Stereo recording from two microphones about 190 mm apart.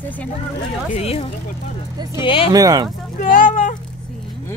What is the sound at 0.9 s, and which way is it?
Speech, 30° left (ahead or behind).